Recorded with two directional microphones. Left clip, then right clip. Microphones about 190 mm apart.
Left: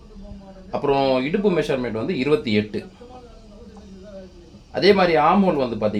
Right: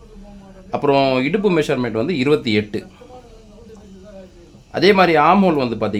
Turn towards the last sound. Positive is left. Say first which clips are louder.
# right 3 dB
turn(degrees=-45)  # may be behind; listen again after turning